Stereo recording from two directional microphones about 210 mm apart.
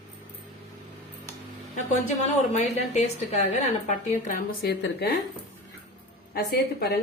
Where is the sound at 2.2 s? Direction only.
35° left (ahead or behind).